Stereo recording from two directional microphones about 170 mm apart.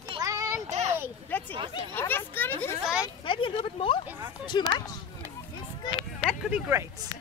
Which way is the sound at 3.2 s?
30° left (ahead or behind).